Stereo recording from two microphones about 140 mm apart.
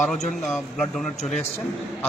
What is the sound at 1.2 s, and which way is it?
Speech, 55° left (ahead or behind).